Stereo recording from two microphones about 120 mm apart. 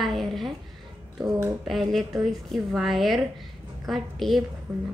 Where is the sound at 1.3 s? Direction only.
30° right (ahead or behind).